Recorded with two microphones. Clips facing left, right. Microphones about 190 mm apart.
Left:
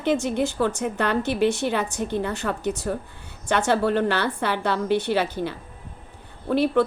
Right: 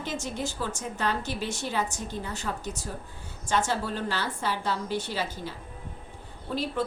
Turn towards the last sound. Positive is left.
turn(degrees=65)  # may be behind; listen again after turning